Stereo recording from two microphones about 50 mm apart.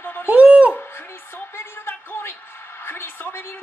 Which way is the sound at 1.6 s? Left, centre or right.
Left.